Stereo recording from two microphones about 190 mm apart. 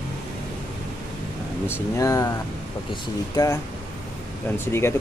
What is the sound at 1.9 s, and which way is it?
Speech, 15° left (ahead or behind).